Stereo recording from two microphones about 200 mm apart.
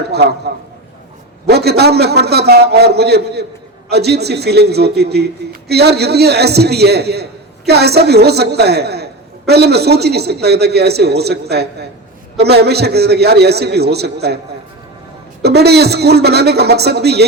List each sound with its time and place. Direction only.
0.1 s a man's voice: 55° right (ahead or behind)
1.5 s a man's voice: 55° right (ahead or behind)
15.4 s a man's voice: 55° right (ahead or behind)